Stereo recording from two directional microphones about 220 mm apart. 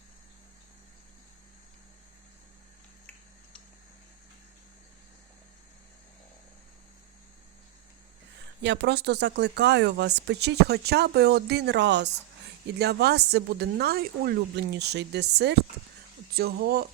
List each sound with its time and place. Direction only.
8.6 s speech: 50° right (ahead or behind)